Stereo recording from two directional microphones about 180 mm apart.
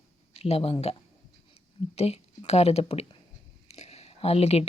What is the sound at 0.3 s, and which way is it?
Speech, 35° left (ahead or behind).